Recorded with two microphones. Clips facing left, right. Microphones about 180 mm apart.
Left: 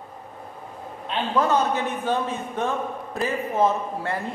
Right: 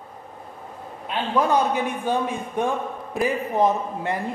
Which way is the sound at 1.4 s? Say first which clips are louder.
Right 1 dB; 15° right (ahead or behind).